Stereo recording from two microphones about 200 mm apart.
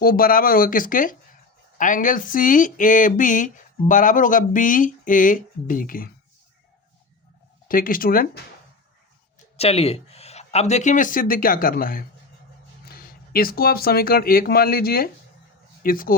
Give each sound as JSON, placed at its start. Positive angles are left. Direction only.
{"t": 0.0, "sound": "speech", "side_deg": 45}
{"t": 7.7, "sound": "speech", "side_deg": 45}
{"t": 9.6, "sound": "speech", "side_deg": 30}